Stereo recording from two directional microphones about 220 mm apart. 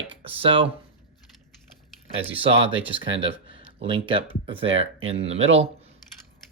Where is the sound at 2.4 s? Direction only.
25° right (ahead or behind).